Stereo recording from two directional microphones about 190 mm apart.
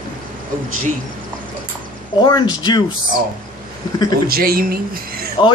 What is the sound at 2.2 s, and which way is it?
Speech, 25° left (ahead or behind).